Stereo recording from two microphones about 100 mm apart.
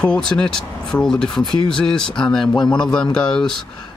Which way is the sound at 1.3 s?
50° left (ahead or behind).